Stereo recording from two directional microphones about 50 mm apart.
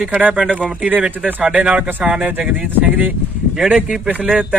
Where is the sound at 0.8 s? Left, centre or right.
Right.